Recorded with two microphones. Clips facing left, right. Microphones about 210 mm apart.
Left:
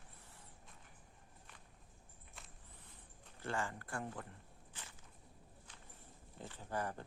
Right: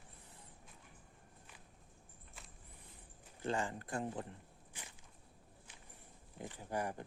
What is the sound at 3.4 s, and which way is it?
Speech, 15° right (ahead or behind).